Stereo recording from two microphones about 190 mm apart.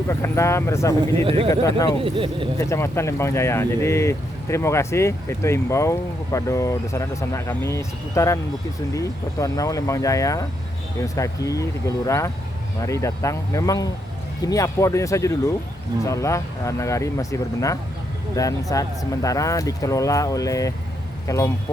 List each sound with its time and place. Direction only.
0.1 s speech: 15° left (ahead or behind)
1.2 s speech: 30° right (ahead or behind)
1.5 s speech: 20° left (ahead or behind)
2.0 s speech: 30° right (ahead or behind)
2.6 s speech: 15° left (ahead or behind)